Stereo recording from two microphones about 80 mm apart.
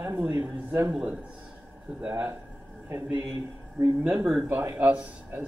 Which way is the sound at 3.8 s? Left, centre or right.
Right.